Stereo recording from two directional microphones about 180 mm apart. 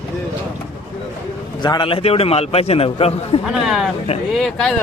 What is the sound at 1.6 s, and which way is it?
A man's voice, 25° left (ahead or behind).